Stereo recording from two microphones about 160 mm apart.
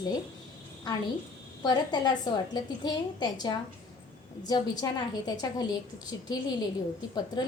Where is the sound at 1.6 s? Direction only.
25° left (ahead or behind).